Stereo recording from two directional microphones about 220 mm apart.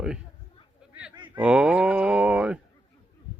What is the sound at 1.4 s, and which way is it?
Speech, 5° right (ahead or behind).